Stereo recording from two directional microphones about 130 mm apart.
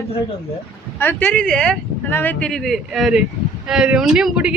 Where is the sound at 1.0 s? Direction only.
15° left (ahead or behind); by 4.5 s 5° right (ahead or behind).